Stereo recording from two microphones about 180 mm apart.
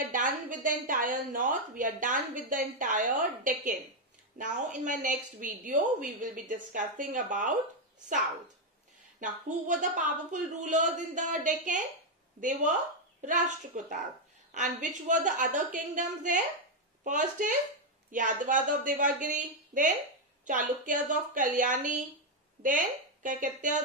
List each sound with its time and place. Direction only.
0.5 s a woman's voice: 45° right (ahead or behind)
9.2 s a woman's voice: 45° right (ahead or behind)